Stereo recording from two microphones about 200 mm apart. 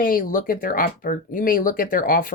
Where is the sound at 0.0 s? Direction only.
45° left (ahead or behind).